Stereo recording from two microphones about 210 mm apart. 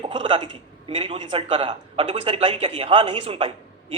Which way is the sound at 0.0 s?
25° right (ahead or behind).